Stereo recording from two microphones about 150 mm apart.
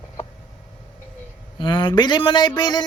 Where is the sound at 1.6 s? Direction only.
30° left (ahead or behind).